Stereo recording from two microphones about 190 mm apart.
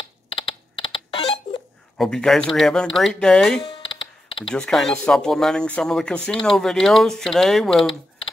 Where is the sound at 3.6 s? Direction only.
25° left (ahead or behind).